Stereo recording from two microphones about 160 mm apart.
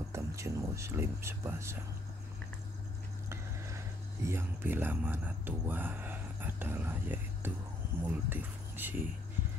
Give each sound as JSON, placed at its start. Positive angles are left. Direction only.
{"t": 0.1, "sound": "speech", "side_deg": -20}
{"t": 3.3, "sound": "a sound", "side_deg": -15}
{"t": 8.0, "sound": "speech", "side_deg": -10}